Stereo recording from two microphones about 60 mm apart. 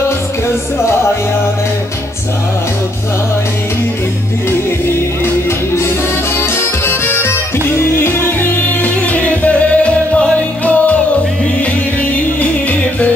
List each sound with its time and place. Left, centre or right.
5.8 s music: left
12.0 s music: left